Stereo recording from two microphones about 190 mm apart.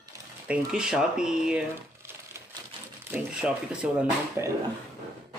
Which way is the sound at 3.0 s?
10° right (ahead or behind).